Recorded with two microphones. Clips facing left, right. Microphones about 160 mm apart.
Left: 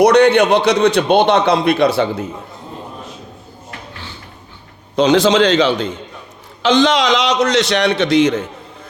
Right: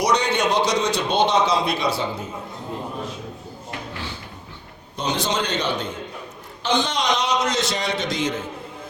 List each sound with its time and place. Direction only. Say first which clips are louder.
0.0 s a man's voice: left 11 dB; 65° left (ahead or behind)
4.9 s a man's voice: left 13 dB; 90° left; by 8.4 s 70° left (ahead or behind)